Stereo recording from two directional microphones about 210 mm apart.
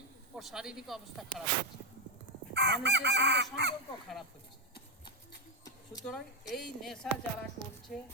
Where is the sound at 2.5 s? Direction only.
55° right (ahead or behind).